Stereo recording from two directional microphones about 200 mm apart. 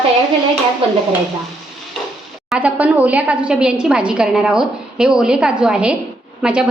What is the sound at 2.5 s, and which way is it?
A woman's voice, 5° right (ahead or behind).